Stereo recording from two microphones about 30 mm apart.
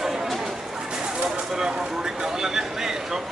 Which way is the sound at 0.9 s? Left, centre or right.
Right.